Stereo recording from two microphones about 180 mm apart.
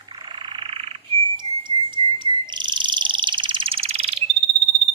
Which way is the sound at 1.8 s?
25° right (ahead or behind).